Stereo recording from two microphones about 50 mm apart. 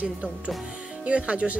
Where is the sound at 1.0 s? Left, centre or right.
Right.